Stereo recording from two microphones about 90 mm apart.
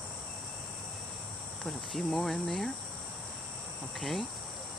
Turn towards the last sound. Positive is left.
turn(degrees=0)  # may be behind; listen again after turning